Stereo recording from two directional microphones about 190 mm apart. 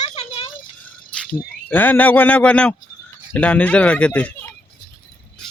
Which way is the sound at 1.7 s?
10° left (ahead or behind).